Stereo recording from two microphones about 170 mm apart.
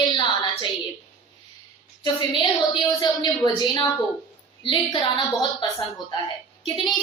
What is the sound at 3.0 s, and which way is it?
A woman's voice, 25° left (ahead or behind).